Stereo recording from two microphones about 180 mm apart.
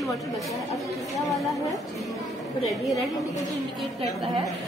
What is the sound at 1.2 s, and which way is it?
Speech, centre (ahead or behind).